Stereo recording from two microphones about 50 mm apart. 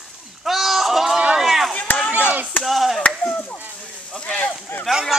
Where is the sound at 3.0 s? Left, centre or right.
Left.